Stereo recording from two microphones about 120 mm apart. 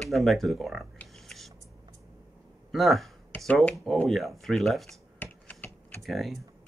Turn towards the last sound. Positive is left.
turn(degrees=0)  # may be behind; listen again after turning